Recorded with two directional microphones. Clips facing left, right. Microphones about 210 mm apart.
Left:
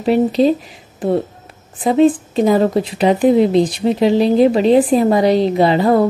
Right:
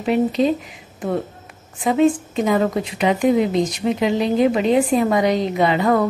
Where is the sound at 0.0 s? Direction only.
35° left (ahead or behind).